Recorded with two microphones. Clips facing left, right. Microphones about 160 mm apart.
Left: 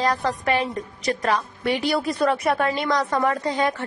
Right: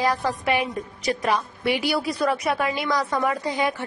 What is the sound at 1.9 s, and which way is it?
A woman's voice, centre (ahead or behind).